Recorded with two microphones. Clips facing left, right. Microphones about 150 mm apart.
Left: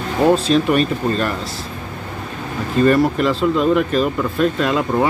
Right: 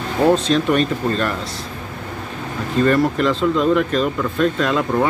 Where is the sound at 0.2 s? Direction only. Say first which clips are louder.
Left 1 dB; 5° left (ahead or behind).